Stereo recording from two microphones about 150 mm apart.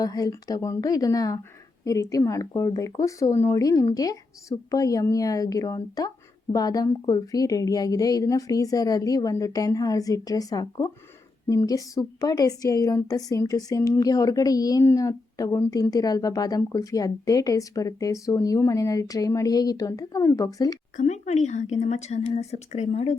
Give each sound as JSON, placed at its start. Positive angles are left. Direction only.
{"t": 0.0, "sound": "speech", "side_deg": 25}
{"t": 20.9, "sound": "a woman's voice", "side_deg": 50}